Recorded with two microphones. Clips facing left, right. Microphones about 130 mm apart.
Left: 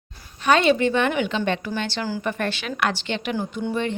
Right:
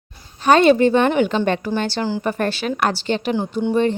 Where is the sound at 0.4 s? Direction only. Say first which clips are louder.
Right 5 dB; 40° right (ahead or behind).